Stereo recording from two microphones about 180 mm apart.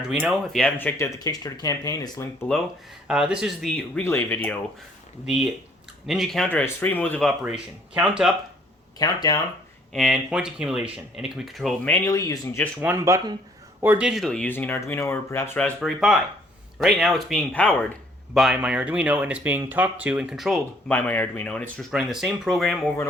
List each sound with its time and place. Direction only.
0.1 s speech: centre (ahead or behind); by 2.5 s 15° left (ahead or behind)
3.1 s speech: 5° right (ahead or behind)
6.1 s speech: centre (ahead or behind)
9.0 s speech: 20° left (ahead or behind)
9.9 s speech: centre (ahead or behind)
12.0 s speech: 15° left (ahead or behind)
12.8 s speech: 15° right (ahead or behind); by 17.9 s 10° left (ahead or behind)
18.3 s speech: 5° right (ahead or behind)